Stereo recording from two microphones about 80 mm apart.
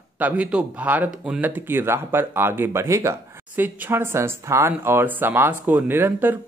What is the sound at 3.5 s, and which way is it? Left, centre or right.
Speech, right.